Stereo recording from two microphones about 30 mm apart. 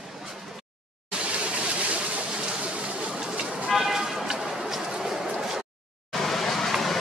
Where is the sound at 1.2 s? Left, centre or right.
Right.